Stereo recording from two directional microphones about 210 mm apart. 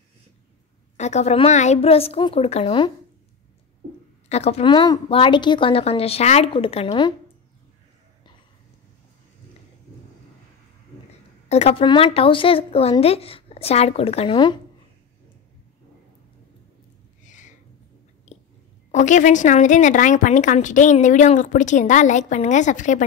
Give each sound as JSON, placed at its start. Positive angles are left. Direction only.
{"t": 0.9, "sound": "speech", "side_deg": 35}
{"t": 4.3, "sound": "speech", "side_deg": 30}
{"t": 11.4, "sound": "speech", "side_deg": 30}
{"t": 17.2, "sound": "a sound", "side_deg": 35}
{"t": 18.9, "sound": "speech", "side_deg": 35}